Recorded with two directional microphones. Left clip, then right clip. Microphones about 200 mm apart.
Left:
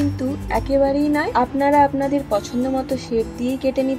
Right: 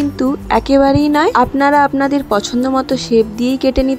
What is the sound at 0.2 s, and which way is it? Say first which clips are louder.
Speech: right 8 dB; 45° right (ahead or behind).